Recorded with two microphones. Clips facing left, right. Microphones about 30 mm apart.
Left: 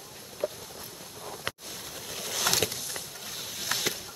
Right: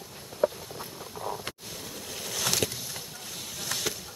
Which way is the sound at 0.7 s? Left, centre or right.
Right.